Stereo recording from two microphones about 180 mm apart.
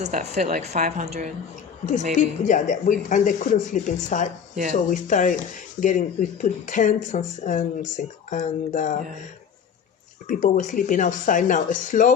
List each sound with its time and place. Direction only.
0.0 s a woman's voice: 40° right (ahead or behind)
2.1 s speech: 45° left (ahead or behind)
10.2 s speech: 45° left (ahead or behind)